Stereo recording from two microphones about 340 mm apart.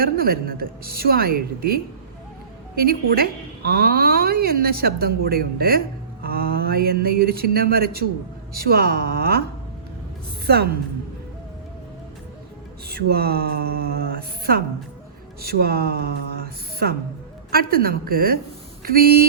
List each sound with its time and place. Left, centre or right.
0.0 s speech: right
10.4 s a woman's voice: right
12.9 s speech: right